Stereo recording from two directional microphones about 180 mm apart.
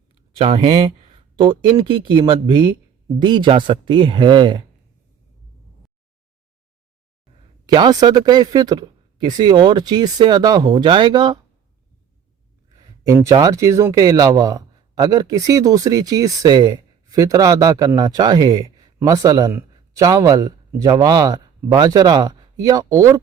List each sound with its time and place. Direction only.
0.3 s speech: 30° right (ahead or behind)
7.7 s speech: 25° right (ahead or behind)
12.7 s speech: 15° right (ahead or behind)